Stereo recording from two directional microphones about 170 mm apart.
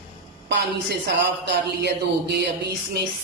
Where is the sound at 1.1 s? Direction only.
80° right.